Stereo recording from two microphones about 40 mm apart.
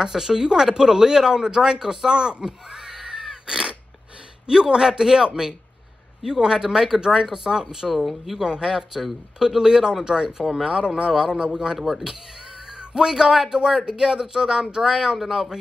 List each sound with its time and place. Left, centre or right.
0.0 s speech: centre